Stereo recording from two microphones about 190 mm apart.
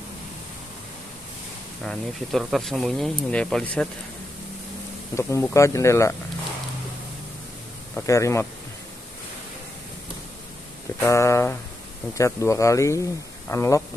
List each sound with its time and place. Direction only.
1.9 s speech: centre (ahead or behind)
5.1 s speech: 15° left (ahead or behind)
8.1 s speech: 15° left (ahead or behind)
11.0 s speech: 15° left (ahead or behind)